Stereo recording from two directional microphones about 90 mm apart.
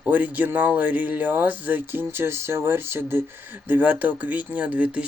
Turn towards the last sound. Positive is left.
turn(degrees=-15)  # may be behind; listen again after turning